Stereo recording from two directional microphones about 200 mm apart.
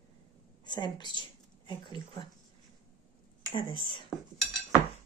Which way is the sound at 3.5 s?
25° left (ahead or behind).